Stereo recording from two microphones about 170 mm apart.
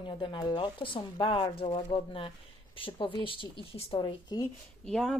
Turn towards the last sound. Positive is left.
turn(degrees=5)  # may be behind; listen again after turning